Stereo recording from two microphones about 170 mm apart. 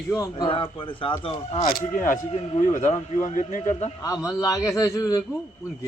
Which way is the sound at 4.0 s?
20° left (ahead or behind).